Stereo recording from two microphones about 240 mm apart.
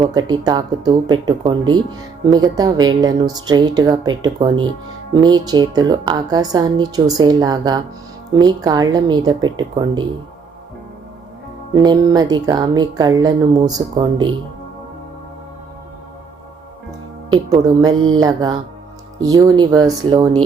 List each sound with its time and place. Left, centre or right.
0.0 s a woman's voice: centre
11.7 s a woman's voice: centre
17.3 s a woman's voice: centre